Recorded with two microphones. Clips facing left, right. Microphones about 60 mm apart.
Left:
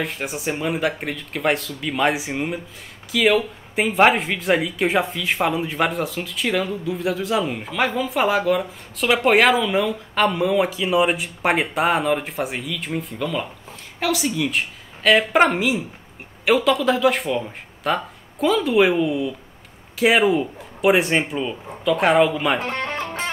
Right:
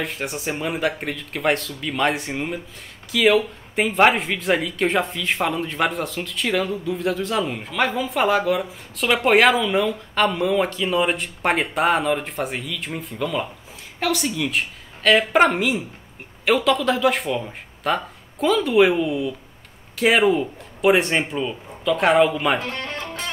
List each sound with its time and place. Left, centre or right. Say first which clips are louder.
0.0 s speech: left 1 dB; centre
22.6 s music: left 3 dB; left